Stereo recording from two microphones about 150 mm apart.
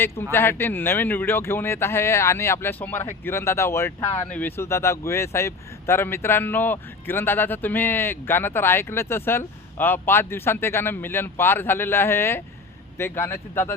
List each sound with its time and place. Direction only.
0.0 s speech: 15° left (ahead or behind)